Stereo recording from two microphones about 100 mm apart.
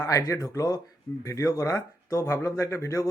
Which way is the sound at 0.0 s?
30° left (ahead or behind).